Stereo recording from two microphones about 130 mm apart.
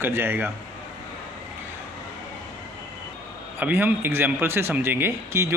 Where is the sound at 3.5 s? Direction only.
15° right (ahead or behind).